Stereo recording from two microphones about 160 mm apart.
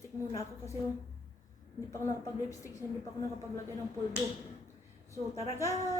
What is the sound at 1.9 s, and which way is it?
Speech, 20° left (ahead or behind).